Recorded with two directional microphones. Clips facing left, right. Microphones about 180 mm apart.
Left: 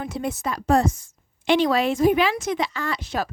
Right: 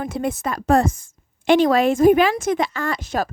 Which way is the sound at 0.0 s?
55° right (ahead or behind).